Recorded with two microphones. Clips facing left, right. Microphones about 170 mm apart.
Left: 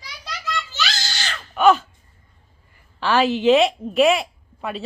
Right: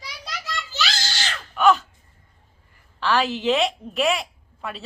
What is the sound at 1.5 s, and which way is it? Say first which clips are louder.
Crow: left 3 dB; centre (ahead or behind).